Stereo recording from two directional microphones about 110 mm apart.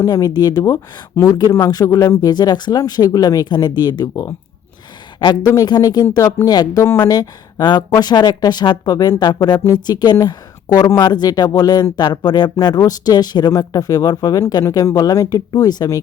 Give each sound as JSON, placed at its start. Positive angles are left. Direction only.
{"t": 0.0, "sound": "speech", "side_deg": 35}